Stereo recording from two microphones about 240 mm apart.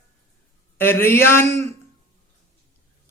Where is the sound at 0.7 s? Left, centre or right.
Centre.